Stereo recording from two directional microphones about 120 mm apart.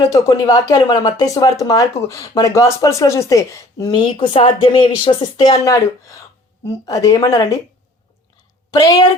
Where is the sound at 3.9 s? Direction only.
45° left (ahead or behind).